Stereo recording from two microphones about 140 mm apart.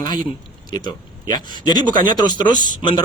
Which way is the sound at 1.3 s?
30° left (ahead or behind).